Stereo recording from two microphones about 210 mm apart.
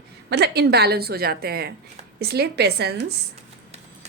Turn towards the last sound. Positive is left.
turn(degrees=-50)  # may be behind; listen again after turning